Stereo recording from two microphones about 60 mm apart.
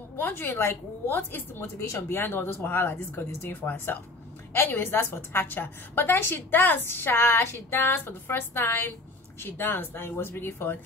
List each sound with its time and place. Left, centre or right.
0.2 s a woman's voice: left